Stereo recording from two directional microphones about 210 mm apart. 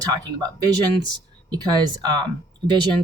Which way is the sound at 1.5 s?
20° right (ahead or behind).